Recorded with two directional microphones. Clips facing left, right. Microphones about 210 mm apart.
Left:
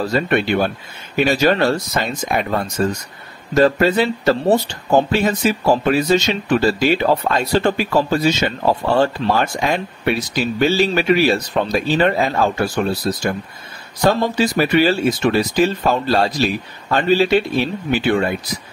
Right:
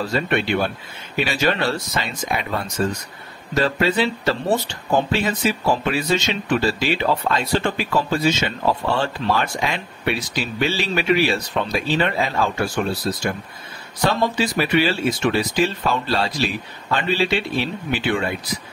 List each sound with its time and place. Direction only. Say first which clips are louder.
0.0 s speech: left 4 dB; 40° left (ahead or behind)